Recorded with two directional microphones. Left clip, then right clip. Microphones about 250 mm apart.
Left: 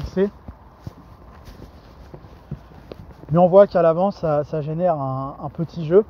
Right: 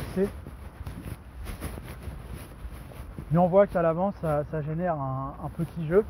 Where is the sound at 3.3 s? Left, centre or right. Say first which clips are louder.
Left 8 dB; left.